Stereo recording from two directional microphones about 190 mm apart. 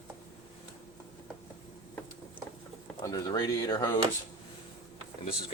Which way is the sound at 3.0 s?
20° left (ahead or behind).